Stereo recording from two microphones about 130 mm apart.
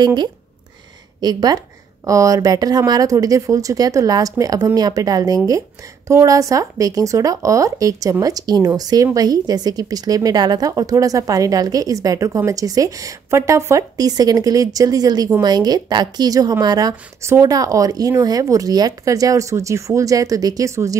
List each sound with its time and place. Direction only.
0.0 s speech: 35° right (ahead or behind)